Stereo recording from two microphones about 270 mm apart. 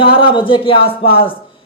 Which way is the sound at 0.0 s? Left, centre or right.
Centre.